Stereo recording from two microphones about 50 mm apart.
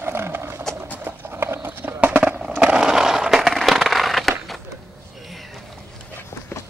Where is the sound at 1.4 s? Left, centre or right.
Right.